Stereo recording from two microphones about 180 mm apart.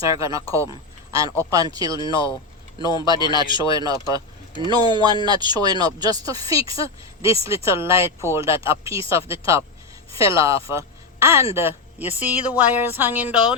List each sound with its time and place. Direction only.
0.0 s a woman's voice: 20° right (ahead or behind)
2.7 s speech: 25° left (ahead or behind)
3.0 s speech: 20° right (ahead or behind)
3.2 s speech: 25° left (ahead or behind)
3.6 s speech: 20° right (ahead or behind)
6.6 s speech: 30° left (ahead or behind)
7.4 s a woman's voice: 15° right (ahead or behind)